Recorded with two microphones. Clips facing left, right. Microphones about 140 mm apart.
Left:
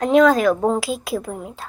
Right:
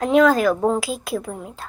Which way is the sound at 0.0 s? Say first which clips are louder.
Left 1 dB; centre (ahead or behind).